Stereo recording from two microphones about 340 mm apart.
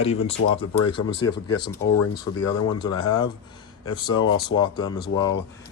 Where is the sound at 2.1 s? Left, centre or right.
Centre.